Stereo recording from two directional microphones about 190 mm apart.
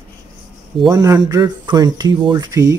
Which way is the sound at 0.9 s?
20° right (ahead or behind).